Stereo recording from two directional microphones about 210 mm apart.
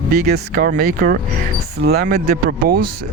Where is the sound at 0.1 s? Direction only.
45° right (ahead or behind).